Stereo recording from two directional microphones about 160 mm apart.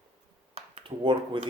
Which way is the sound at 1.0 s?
30° right (ahead or behind).